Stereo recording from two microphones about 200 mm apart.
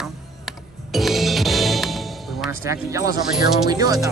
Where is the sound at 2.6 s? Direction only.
15° right (ahead or behind).